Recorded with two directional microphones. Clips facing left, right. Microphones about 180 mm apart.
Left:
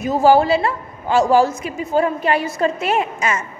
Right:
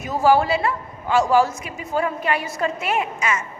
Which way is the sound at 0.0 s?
25° left (ahead or behind).